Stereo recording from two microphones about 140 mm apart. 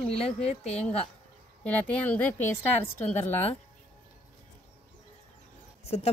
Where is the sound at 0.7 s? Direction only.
10° left (ahead or behind).